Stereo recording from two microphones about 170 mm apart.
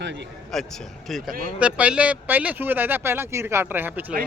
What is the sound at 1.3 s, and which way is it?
Speech, 55° right (ahead or behind).